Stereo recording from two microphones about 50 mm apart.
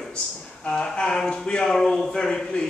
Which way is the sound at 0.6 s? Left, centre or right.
Left.